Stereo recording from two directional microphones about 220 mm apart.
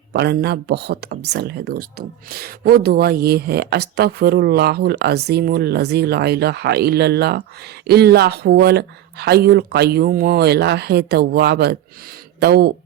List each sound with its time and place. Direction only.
0.1 s speech: 50° right (ahead or behind)